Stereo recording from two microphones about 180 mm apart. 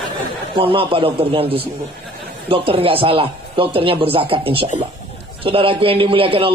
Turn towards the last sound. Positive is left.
turn(degrees=-30)  # may be behind; listen again after turning